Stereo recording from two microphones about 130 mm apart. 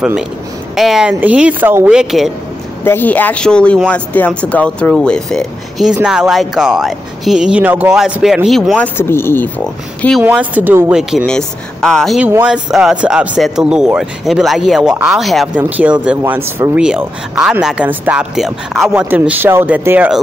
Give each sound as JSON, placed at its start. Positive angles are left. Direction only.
{"t": 0.7, "sound": "speech", "side_deg": -5}
{"t": 2.8, "sound": "speech", "side_deg": 15}
{"t": 10.2, "sound": "speech", "side_deg": -10}
{"t": 11.0, "sound": "speech", "side_deg": -5}
{"t": 12.3, "sound": "speech", "side_deg": -10}
{"t": 16.8, "sound": "speech", "side_deg": -5}
{"t": 19.0, "sound": "speech", "side_deg": -15}